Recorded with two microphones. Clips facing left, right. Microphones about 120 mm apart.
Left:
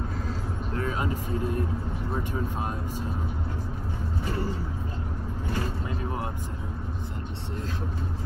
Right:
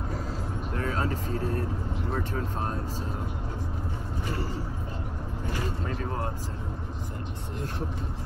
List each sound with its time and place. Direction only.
0.7 s vehicle: 20° left (ahead or behind)
2.1 s speech: 10° left (ahead or behind)